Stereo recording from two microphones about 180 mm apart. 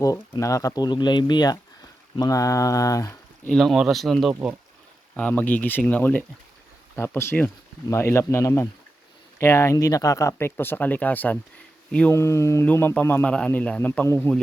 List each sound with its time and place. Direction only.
0.0 s speech: 20° left (ahead or behind)
3.5 s a man's voice: centre (ahead or behind)